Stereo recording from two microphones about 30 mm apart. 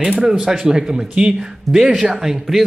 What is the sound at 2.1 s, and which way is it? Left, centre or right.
Speech, centre.